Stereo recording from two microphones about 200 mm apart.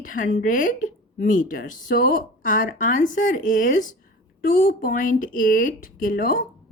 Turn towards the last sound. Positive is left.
turn(degrees=45)  # may be behind; listen again after turning